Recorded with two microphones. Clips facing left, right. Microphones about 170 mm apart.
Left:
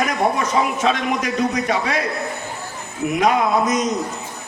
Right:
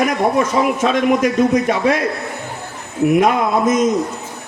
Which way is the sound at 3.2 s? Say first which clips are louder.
Right 2 dB; 50° right (ahead or behind).